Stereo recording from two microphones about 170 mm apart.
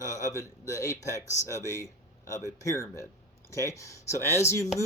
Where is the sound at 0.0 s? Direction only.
20° left (ahead or behind).